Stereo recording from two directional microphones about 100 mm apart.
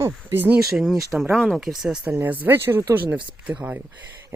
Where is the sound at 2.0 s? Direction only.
20° right (ahead or behind).